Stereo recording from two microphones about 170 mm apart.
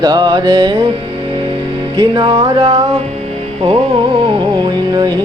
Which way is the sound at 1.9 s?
30° right (ahead or behind).